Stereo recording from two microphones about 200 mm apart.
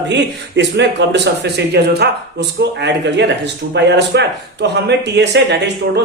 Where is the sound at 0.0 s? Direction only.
60° right (ahead or behind).